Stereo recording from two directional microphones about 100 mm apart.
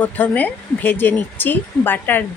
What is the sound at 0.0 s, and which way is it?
Speech, 15° left (ahead or behind).